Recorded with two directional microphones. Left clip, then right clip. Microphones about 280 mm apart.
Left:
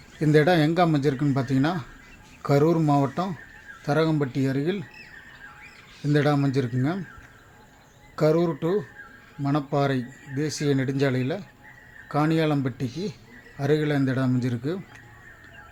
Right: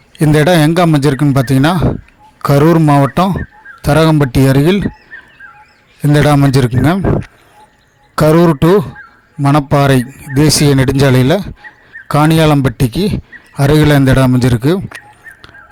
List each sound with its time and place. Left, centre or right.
0.2 s a man's voice: right
6.1 s a man's voice: right